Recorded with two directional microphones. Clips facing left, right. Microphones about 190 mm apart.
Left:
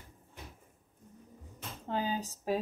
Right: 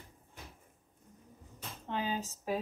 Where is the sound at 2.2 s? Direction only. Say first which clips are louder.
Left 3 dB; 35° left (ahead or behind).